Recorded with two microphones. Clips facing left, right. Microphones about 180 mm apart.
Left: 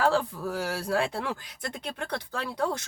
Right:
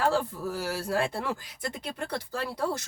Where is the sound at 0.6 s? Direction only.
Centre (ahead or behind).